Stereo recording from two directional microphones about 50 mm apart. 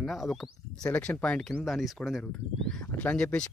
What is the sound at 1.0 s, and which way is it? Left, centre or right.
Speech, left.